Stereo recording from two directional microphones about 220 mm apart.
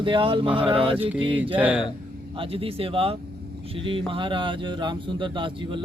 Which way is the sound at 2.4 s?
25° right (ahead or behind).